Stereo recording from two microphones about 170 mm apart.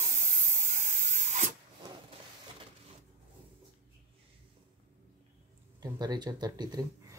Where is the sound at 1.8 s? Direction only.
25° right (ahead or behind).